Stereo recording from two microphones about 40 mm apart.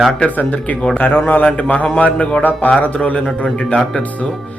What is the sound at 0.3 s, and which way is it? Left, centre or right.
A man's voice, left.